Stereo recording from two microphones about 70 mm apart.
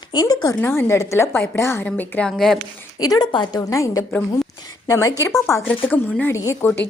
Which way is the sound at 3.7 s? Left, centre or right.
Left.